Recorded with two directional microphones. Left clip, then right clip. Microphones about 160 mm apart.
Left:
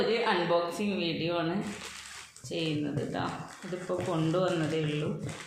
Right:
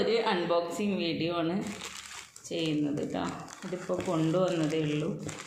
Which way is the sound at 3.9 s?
40° right (ahead or behind).